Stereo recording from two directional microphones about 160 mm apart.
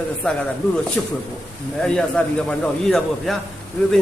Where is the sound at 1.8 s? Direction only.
5° left (ahead or behind).